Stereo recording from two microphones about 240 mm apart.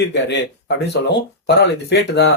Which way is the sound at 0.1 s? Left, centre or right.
Left.